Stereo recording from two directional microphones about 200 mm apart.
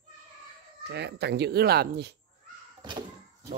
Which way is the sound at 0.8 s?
55° right (ahead or behind).